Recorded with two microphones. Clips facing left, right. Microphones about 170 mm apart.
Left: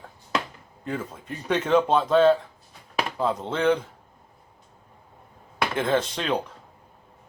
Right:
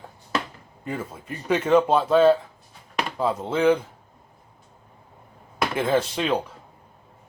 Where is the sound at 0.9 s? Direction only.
5° right (ahead or behind).